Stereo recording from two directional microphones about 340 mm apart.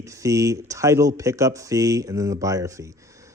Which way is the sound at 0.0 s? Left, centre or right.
Centre.